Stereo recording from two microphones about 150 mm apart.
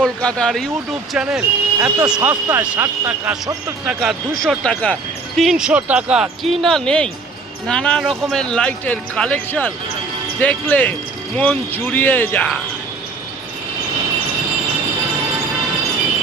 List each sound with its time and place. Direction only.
0.0 s speech: 5° left (ahead or behind)